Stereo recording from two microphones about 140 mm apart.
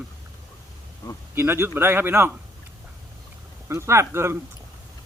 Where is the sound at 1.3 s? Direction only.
15° right (ahead or behind).